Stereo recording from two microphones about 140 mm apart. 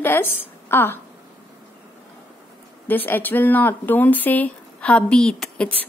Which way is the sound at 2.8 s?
15° left (ahead or behind).